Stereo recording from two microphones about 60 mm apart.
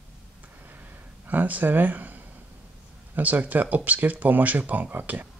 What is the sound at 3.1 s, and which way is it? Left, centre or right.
Speech, right.